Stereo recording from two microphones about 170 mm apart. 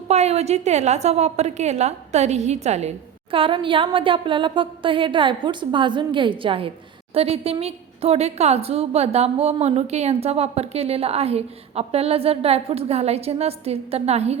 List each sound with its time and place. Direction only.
0.1 s a woman's voice: 40° right (ahead or behind)
3.3 s a woman's voice: 30° right (ahead or behind)